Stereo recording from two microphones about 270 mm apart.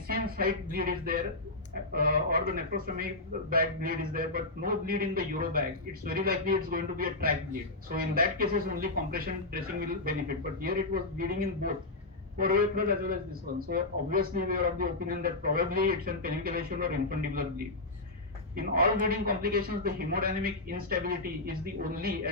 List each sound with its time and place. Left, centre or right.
0.1 s speech: right
18.5 s speech: right